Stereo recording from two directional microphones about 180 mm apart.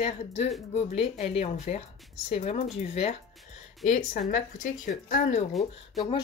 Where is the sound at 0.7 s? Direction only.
35° left (ahead or behind).